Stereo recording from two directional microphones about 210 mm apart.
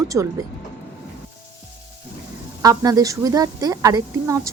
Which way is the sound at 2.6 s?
15° right (ahead or behind).